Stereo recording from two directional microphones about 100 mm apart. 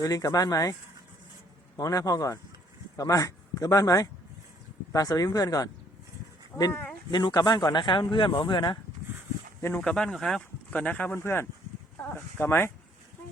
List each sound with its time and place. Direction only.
0.0 s speech: 35° left (ahead or behind)
7.1 s speech: 45° left (ahead or behind)
9.6 s speech: 25° left (ahead or behind)
9.8 s speech: 10° left (ahead or behind); by 12.7 s 25° left (ahead or behind)